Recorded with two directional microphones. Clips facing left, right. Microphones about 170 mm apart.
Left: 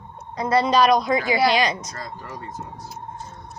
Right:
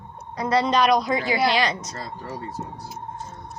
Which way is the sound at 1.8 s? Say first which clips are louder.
Right 1 dB; 25° right (ahead or behind).